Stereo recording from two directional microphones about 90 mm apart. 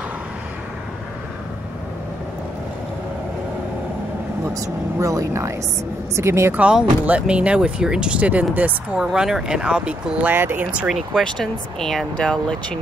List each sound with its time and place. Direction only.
4.9 s speech: 40° right (ahead or behind)
6.5 s speech: 10° right (ahead or behind)
10.3 s speech: 25° right (ahead or behind)
10.9 s speech: centre (ahead or behind)